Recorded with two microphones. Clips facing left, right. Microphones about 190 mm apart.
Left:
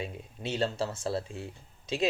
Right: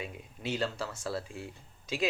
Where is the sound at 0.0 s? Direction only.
25° left (ahead or behind).